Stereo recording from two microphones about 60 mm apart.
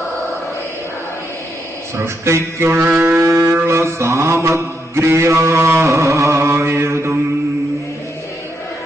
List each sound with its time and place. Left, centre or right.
2.0 s speech: right
3.2 s music: right
3.6 s mantra: right